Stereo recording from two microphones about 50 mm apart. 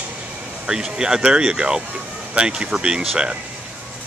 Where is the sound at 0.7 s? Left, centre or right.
Centre.